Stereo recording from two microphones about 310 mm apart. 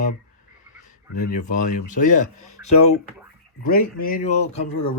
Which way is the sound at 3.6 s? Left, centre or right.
Left.